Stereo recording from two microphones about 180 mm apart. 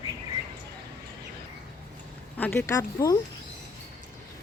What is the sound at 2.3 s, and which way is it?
Speech, 10° left (ahead or behind).